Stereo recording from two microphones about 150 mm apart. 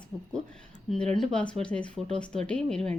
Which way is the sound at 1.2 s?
5° left (ahead or behind).